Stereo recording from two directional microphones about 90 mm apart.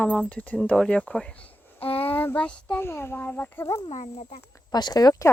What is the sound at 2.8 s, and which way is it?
Speech, 25° left (ahead or behind).